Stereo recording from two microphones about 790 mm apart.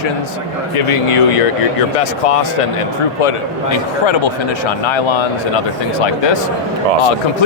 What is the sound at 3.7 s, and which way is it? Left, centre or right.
Speech, left.